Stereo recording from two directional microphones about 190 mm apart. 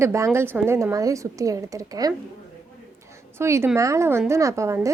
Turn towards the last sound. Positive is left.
turn(degrees=-15)  # may be behind; listen again after turning